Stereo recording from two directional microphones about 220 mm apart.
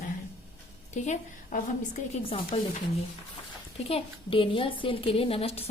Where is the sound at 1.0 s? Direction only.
35° left (ahead or behind).